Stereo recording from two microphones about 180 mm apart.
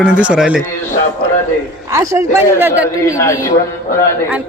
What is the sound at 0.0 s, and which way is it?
Speech, 5° right (ahead or behind).